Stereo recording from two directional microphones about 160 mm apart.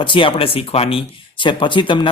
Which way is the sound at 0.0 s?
30° left (ahead or behind).